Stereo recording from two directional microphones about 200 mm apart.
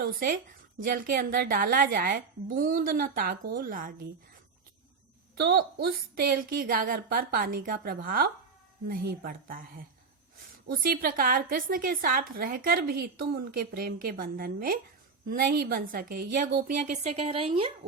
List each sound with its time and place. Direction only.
0.0 s a woman's voice: 45° right (ahead or behind)
5.4 s a woman's voice: 50° right (ahead or behind); by 17.7 s 25° right (ahead or behind)